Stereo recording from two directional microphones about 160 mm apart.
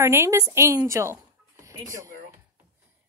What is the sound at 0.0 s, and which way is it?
Speech, 15° right (ahead or behind).